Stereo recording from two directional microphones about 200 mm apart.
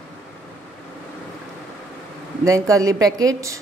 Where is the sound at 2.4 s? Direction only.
15° right (ahead or behind).